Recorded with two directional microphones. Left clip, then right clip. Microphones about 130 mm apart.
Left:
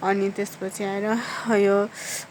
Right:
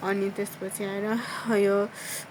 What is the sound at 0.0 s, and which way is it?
Speech, 45° left (ahead or behind).